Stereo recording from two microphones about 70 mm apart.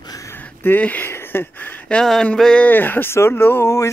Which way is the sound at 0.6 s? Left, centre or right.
Left.